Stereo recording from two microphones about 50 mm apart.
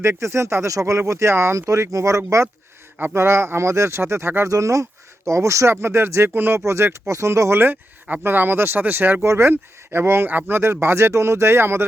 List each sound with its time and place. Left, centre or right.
0.0 s speech: right
3.2 s speech: right
4.4 s speech: right
8.2 s speech: right
9.2 s speech: right
9.5 s speech: right
10.2 s speech: right
10.6 s speech: right